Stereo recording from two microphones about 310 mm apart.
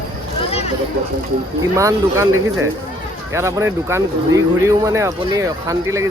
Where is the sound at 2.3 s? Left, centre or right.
Right.